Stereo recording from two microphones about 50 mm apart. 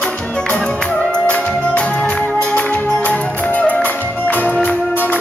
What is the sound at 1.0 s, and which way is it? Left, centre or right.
Music, left.